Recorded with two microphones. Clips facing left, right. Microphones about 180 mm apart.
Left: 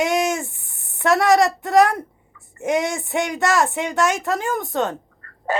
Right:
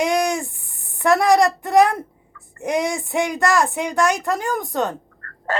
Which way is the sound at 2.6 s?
Centre (ahead or behind).